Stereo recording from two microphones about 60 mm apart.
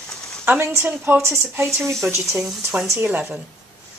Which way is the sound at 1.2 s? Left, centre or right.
Right.